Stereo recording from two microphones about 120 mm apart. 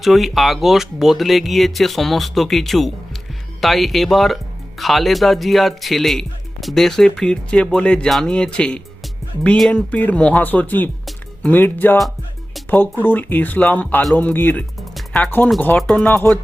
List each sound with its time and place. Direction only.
0.0 s speech: centre (ahead or behind); by 11.9 s 15° left (ahead or behind)
13.1 s speech: 15° left (ahead or behind)
14.8 s music: centre (ahead or behind)
15.2 s speech: 15° left (ahead or behind)